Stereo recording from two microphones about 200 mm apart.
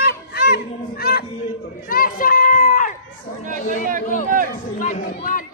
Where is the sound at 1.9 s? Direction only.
45° left (ahead or behind).